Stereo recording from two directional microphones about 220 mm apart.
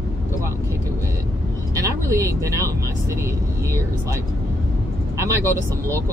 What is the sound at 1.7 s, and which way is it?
Vehicle, 15° right (ahead or behind).